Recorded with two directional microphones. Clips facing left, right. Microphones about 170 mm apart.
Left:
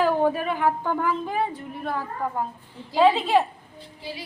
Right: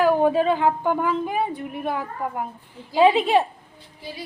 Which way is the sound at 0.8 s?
15° right (ahead or behind).